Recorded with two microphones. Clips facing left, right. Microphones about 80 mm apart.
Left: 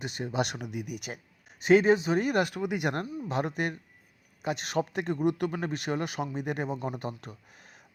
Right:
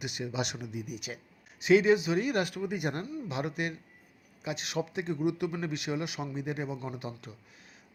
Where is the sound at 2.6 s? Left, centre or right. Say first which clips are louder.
Left 3 dB; left.